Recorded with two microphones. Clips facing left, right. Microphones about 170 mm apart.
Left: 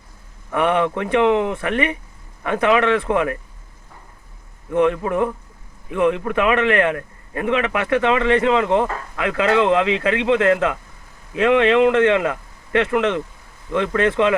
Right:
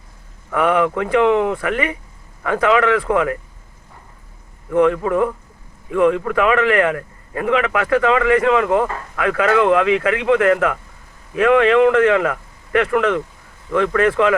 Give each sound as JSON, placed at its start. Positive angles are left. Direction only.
{"t": 0.5, "sound": "a man's voice", "side_deg": 25}
{"t": 4.7, "sound": "a man's voice", "side_deg": 20}